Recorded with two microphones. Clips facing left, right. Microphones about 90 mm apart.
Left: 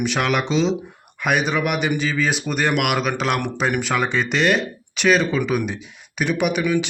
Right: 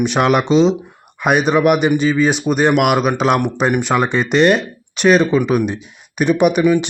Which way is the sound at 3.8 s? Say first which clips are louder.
Right 5 dB; 40° right (ahead or behind).